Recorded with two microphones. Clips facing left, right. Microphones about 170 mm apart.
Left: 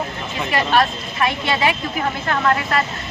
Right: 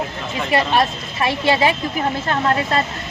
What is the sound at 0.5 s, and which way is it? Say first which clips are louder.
Speech: right 1 dB; 25° right (ahead or behind).